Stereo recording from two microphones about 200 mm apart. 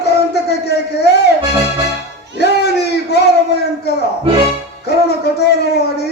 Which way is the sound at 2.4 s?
55° left (ahead or behind).